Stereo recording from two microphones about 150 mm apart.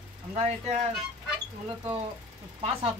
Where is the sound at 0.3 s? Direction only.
45° right (ahead or behind).